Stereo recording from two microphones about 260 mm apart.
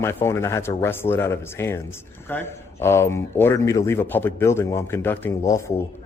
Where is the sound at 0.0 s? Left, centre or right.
Centre.